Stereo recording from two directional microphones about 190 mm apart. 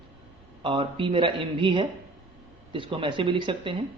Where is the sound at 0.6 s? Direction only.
30° right (ahead or behind).